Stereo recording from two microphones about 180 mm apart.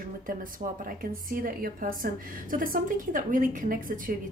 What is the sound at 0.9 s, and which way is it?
Speech, 50° right (ahead or behind).